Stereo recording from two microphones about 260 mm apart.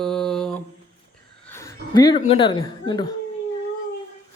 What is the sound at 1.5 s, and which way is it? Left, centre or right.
Speech, centre.